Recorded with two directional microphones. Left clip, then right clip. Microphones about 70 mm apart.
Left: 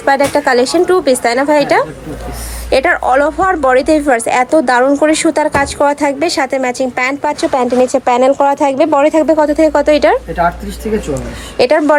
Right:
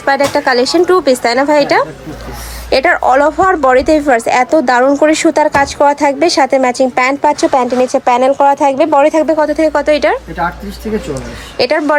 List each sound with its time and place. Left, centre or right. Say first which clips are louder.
0.0 s speech: even; right
3.0 s a woman's voice: right 2 dB; right
7.3 s speech: right 3 dB; right